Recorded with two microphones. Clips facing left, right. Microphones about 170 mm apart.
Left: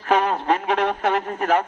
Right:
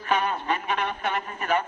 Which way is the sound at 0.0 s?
85° left.